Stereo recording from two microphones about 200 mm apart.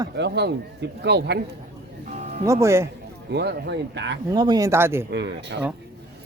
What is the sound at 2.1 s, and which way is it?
Music, 35° right (ahead or behind).